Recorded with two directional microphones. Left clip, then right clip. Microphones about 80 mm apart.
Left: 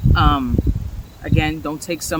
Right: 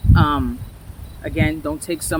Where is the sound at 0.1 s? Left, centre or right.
Left.